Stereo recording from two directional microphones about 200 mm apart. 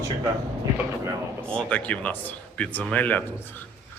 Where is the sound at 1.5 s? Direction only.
5° left (ahead or behind).